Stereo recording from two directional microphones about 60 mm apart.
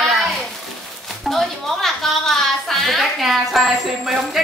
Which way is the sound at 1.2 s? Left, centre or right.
Centre.